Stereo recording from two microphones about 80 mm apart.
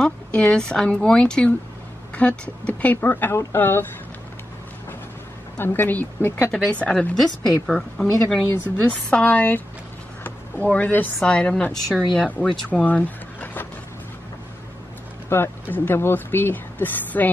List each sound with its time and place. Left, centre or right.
0.0 s a woman's voice: centre; by 3.8 s left
5.6 s speech: left
6.5 s a woman's voice: centre
8.9 s a woman's voice: centre
10.2 s a sound: centre
11.1 s a woman's voice: centre
15.2 s speech: left